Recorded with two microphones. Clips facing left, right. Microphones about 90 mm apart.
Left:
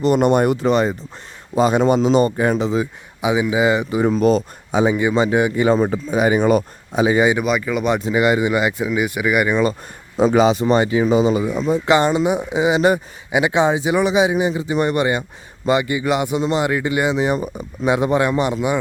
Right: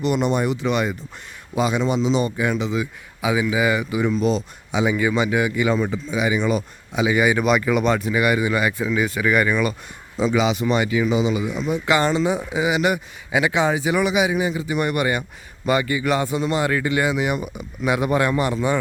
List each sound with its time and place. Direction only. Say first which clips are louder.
0.0 s a man's voice: left 6 dB; 45° left (ahead or behind)
0.7 s a man's voice: left 5 dB; 35° left (ahead or behind)
3.2 s a man's voice: left 3 dB; 20° left (ahead or behind)
4.0 s speech: left 6 dB; 45° left (ahead or behind)
4.9 s speech: left 3 dB; 25° left (ahead or behind)
7.4 s speech: right 1 dB; centre (ahead or behind)
8.0 s a man's voice: left 3 dB; 25° left (ahead or behind)
9.5 s a man's voice: left 4 dB; 30° left (ahead or behind)
10.2 s a man's voice: left 6 dB; 45° left (ahead or behind); by 18.8 s 15° left (ahead or behind)